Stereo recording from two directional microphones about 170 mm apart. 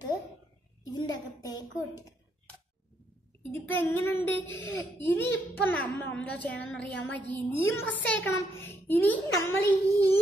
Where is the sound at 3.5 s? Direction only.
10° left (ahead or behind).